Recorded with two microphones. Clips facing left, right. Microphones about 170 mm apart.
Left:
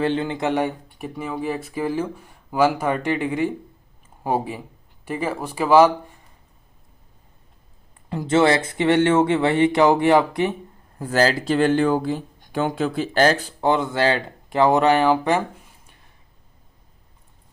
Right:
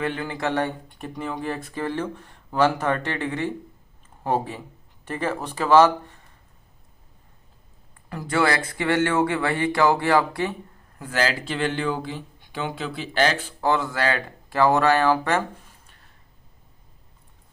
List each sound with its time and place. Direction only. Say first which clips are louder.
0.0 s speech: left 5 dB; 25° left (ahead or behind)
8.1 s speech: left 5 dB; 25° left (ahead or behind)
10.9 s speech: left 6 dB; 35° left (ahead or behind)
13.6 s speech: left 1 dB; 20° left (ahead or behind)